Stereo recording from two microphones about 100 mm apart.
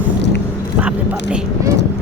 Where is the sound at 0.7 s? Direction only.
15° right (ahead or behind).